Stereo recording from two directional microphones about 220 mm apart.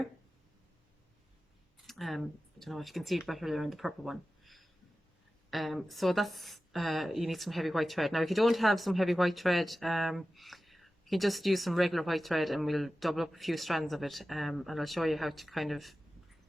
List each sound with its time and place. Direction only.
1.9 s speech: centre (ahead or behind)